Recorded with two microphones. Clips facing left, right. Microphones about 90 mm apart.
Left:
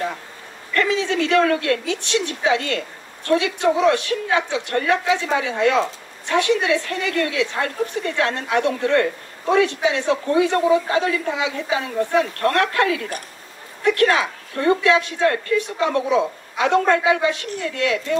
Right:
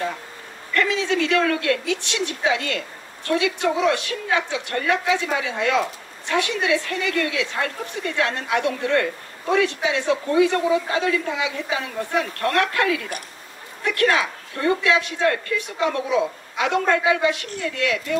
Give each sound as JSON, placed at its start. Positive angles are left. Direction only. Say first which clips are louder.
{"t": 0.7, "sound": "a woman's voice", "louder": "left 1 dB", "side_deg": 35}